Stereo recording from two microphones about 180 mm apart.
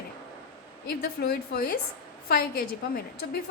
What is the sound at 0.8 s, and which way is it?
A woman's voice, 60° left (ahead or behind).